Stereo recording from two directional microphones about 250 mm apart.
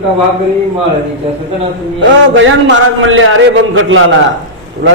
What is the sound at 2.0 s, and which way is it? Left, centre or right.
A man's voice, right.